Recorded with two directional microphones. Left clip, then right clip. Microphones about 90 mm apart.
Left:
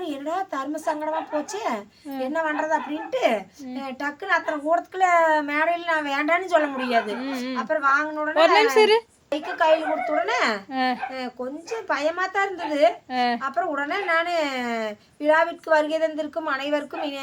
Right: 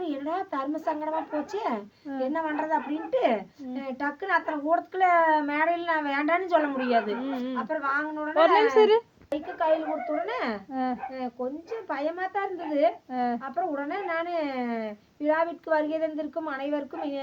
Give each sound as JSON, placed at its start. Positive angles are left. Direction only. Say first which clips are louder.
{"t": 0.0, "sound": "a woman's voice", "louder": "left 3 dB", "side_deg": 35}
{"t": 9.3, "sound": "a woman's voice", "louder": "left 5 dB", "side_deg": 15}